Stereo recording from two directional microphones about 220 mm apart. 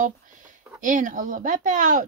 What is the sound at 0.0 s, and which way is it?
Speech, 35° right (ahead or behind).